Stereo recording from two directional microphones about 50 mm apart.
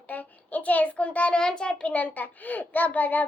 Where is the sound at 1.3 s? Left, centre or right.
Centre; by 3.2 s left.